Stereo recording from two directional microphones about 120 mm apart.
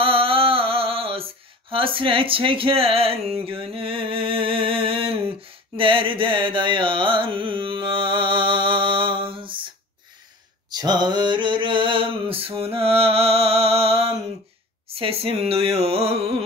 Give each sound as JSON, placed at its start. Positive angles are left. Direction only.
{"t": 0.0, "sound": "a sound", "side_deg": -50}
{"t": 10.7, "sound": "mantra", "side_deg": -35}
{"t": 15.0, "sound": "speech", "side_deg": -55}